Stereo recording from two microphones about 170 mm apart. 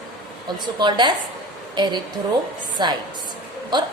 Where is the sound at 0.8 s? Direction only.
25° right (ahead or behind).